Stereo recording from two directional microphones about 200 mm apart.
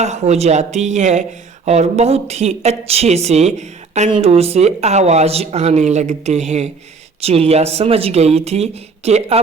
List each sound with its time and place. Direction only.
0.0 s speech: 35° right (ahead or behind)